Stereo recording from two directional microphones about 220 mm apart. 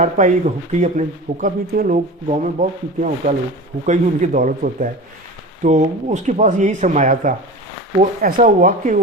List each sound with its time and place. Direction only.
0.0 s speech: 35° right (ahead or behind)